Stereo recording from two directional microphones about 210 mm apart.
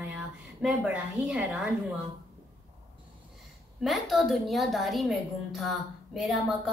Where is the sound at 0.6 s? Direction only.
5° right (ahead or behind).